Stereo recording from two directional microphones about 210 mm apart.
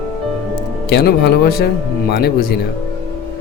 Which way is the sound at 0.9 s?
50° left (ahead or behind).